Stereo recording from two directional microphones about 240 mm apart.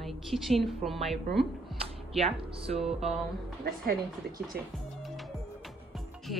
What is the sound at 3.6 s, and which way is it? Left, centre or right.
Speech, right.